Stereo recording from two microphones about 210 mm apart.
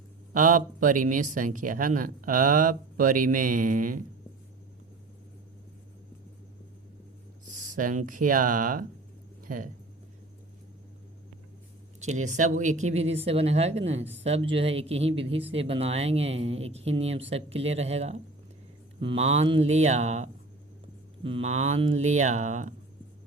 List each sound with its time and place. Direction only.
0.3 s speech: 40° right (ahead or behind)
7.7 s speech: 40° right (ahead or behind)
11.9 s speech: 35° right (ahead or behind)